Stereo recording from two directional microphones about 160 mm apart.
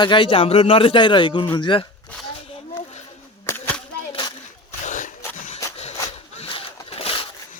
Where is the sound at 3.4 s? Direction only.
15° left (ahead or behind).